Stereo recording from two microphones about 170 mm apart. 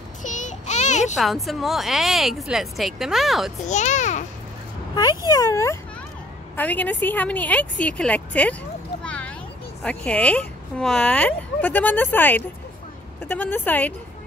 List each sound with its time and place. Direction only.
0.2 s a sound: 45° left (ahead or behind)
1.1 s speech: centre (ahead or behind)
3.6 s a child's voice: 45° left (ahead or behind)
4.9 s speech: 25° left (ahead or behind); by 8.5 s 10° left (ahead or behind)
9.0 s a sound: 5° left (ahead or behind)
9.8 s speech: 5° left (ahead or behind)